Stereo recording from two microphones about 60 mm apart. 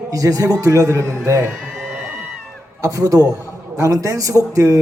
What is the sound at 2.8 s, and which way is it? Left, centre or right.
Speech, right.